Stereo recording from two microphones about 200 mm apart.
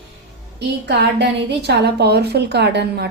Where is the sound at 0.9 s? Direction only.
55° right (ahead or behind).